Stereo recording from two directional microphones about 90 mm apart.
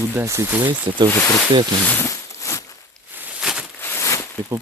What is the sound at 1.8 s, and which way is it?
Speech, 20° left (ahead or behind).